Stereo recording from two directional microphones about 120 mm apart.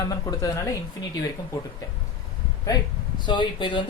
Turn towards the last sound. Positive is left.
turn(degrees=40)  # may be behind; listen again after turning